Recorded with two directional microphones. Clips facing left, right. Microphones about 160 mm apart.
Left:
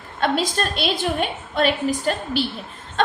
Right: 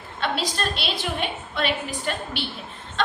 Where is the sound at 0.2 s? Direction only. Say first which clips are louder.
Left 5 dB; 45° left (ahead or behind).